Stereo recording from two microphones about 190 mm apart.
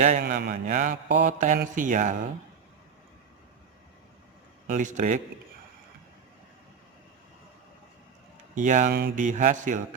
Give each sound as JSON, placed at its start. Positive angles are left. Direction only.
{"t": 0.2, "sound": "mantra", "side_deg": -55}
{"t": 4.6, "sound": "speech", "side_deg": -40}
{"t": 8.5, "sound": "speech", "side_deg": -40}